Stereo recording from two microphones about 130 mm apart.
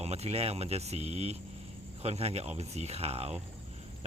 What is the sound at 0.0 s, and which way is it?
Speech, 55° right (ahead or behind).